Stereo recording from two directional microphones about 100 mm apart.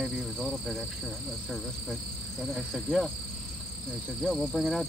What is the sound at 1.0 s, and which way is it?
Speech, 5° left (ahead or behind).